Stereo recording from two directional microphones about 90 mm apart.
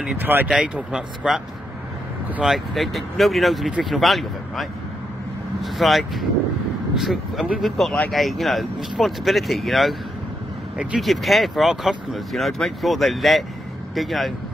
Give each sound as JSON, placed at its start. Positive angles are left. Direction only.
{"t": 0.2, "sound": "speech", "side_deg": -20}
{"t": 0.7, "sound": "speech", "side_deg": -10}
{"t": 2.4, "sound": "speech", "side_deg": 0}
{"t": 11.0, "sound": "speech", "side_deg": 0}